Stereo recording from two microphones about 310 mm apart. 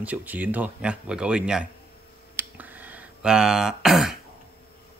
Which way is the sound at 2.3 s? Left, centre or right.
Centre.